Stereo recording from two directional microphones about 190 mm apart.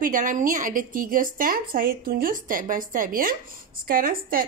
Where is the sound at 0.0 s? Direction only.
45° right (ahead or behind).